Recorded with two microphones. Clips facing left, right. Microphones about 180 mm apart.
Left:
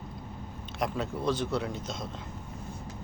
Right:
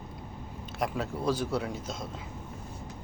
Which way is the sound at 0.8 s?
5° right (ahead or behind).